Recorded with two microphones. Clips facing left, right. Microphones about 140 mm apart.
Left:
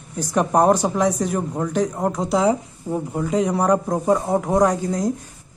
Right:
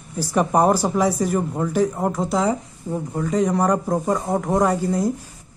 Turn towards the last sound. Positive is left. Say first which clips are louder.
# left 1 dB
turn(degrees=-5)  # may be behind; listen again after turning